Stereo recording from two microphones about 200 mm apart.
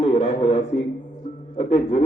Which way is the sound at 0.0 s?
30° left (ahead or behind).